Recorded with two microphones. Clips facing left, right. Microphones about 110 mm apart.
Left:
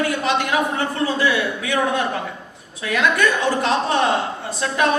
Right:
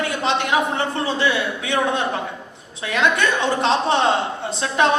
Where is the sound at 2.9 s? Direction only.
25° right (ahead or behind).